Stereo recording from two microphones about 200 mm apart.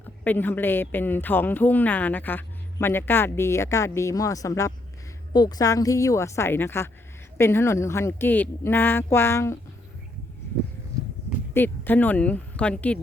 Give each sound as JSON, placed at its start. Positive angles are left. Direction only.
{"t": 0.3, "sound": "a woman's voice", "side_deg": 10}
{"t": 11.5, "sound": "a woman's voice", "side_deg": 10}